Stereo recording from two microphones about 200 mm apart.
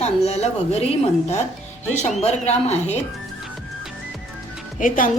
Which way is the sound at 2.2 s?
35° left (ahead or behind).